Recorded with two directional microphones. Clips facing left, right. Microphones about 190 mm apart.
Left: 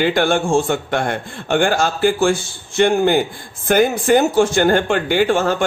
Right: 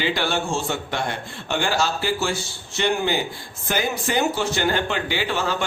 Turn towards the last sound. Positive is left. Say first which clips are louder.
# left 9 dB
turn(degrees=50)  # may be behind; listen again after turning